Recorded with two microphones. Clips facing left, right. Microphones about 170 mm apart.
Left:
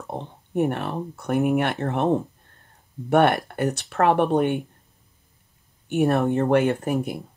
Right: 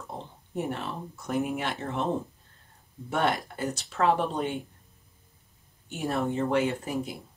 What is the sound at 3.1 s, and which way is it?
Speech, 65° left (ahead or behind).